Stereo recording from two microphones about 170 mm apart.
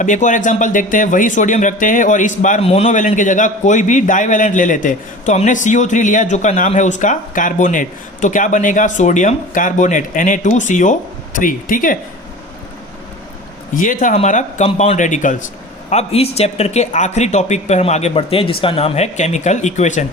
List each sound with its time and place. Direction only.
0.0 s speech: 45° left (ahead or behind)
13.7 s speech: 50° left (ahead or behind)
15.9 s speech: 40° left (ahead or behind)